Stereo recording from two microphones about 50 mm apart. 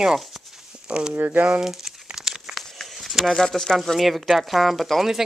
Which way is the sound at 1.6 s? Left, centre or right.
Centre.